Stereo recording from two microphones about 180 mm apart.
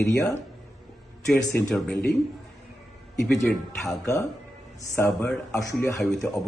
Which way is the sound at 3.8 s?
15° left (ahead or behind).